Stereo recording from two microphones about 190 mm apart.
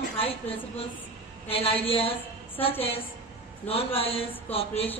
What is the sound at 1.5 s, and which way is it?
Speech, 30° left (ahead or behind).